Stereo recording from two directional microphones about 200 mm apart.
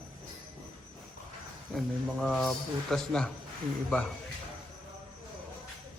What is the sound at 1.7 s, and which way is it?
A man's voice, centre (ahead or behind).